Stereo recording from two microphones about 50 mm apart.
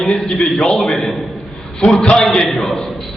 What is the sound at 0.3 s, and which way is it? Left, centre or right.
Speech, left.